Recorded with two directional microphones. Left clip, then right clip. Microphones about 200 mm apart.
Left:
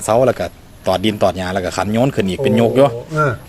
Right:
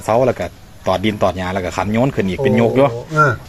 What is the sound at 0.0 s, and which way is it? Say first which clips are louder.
Speech: left 1 dB; 15° left (ahead or behind).